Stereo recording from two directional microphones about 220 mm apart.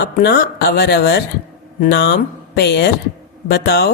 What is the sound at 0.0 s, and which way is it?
Speech, 50° left (ahead or behind).